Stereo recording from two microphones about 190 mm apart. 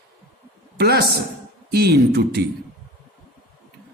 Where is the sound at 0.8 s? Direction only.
55° right (ahead or behind).